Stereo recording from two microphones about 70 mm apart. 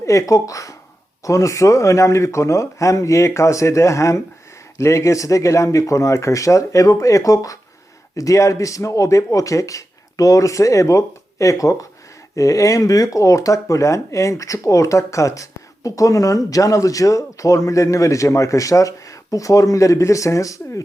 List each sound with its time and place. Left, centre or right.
0.0 s speech: left